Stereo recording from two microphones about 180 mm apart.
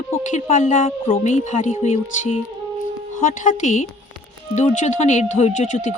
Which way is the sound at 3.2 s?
45° left (ahead or behind).